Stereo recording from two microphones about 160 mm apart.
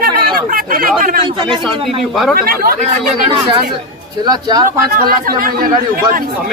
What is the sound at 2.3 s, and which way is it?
Speech, 70° right (ahead or behind).